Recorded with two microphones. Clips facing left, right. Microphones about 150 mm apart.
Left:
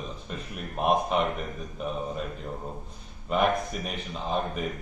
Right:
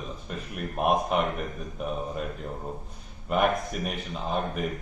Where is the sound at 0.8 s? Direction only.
5° right (ahead or behind).